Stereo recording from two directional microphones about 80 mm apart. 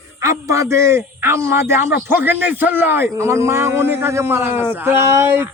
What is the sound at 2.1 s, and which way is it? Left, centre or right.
A man's voice, right.